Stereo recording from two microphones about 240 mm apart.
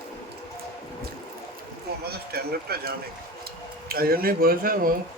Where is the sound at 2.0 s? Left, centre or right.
Right.